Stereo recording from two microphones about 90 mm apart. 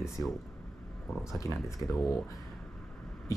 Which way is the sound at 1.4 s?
35° left (ahead or behind).